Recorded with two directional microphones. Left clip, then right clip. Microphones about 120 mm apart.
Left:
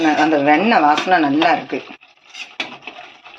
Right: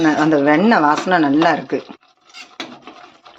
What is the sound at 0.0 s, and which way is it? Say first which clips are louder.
Speech: even; 60° right (ahead or behind).